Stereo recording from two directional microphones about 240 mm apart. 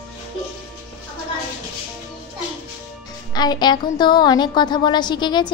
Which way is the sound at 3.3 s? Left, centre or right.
Centre.